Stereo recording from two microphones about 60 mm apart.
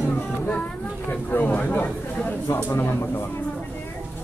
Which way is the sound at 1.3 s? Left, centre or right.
Left.